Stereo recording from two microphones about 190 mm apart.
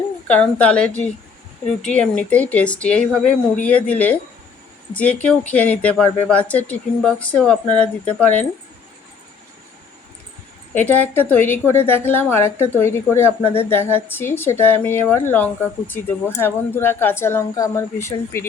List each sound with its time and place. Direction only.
0.3 s a woman's voice: 5° left (ahead or behind)
10.8 s a woman's voice: 10° left (ahead or behind)